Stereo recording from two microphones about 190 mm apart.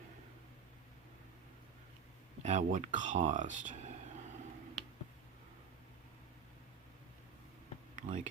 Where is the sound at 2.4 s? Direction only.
40° right (ahead or behind).